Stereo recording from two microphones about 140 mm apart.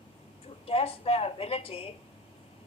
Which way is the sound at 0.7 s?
45° left (ahead or behind).